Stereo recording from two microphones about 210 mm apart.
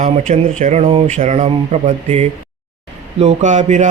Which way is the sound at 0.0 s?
35° right (ahead or behind).